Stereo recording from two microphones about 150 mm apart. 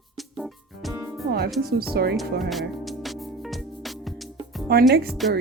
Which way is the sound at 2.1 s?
Centre (ahead or behind).